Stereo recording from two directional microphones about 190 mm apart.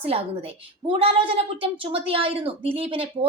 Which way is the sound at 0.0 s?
30° right (ahead or behind).